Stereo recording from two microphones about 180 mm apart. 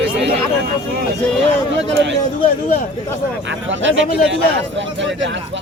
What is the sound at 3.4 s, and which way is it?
Speech, 90° right.